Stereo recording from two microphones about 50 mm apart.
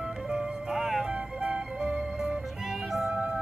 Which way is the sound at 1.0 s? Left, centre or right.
Right.